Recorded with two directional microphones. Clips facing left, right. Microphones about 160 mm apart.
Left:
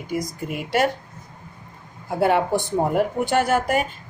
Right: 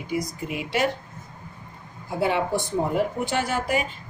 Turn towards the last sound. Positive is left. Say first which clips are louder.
# left 5 dB
turn(degrees=50)  # may be behind; listen again after turning